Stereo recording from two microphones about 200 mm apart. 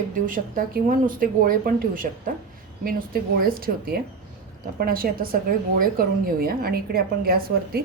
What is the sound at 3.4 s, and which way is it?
A woman's voice, 50° right (ahead or behind).